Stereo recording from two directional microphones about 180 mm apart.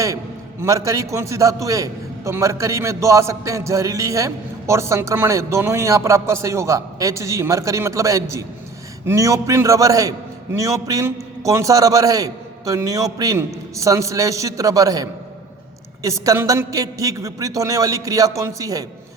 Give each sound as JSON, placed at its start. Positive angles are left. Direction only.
{"t": 0.6, "sound": "a man's voice", "side_deg": -15}
{"t": 16.0, "sound": "a man's voice", "side_deg": -15}